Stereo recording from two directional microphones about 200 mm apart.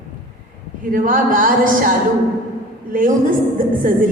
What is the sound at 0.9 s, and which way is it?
Speech, 40° right (ahead or behind).